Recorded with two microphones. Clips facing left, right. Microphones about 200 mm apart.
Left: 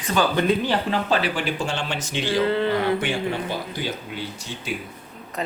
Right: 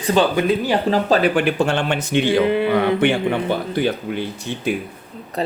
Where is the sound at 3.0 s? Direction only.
60° right (ahead or behind).